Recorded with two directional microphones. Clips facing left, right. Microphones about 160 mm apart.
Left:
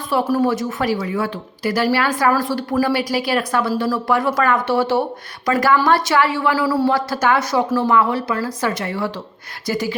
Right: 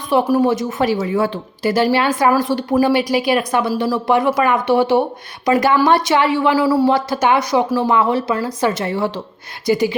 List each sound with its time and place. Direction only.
0.1 s a woman's voice: 15° right (ahead or behind)